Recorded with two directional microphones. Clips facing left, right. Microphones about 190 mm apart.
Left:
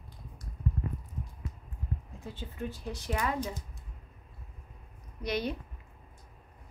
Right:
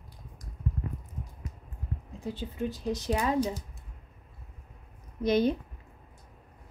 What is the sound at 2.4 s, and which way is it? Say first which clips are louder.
A woman's voice: right 6 dB; 20° right (ahead or behind).